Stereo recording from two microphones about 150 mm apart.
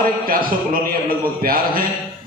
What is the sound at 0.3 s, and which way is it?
A man's voice, 70° right (ahead or behind).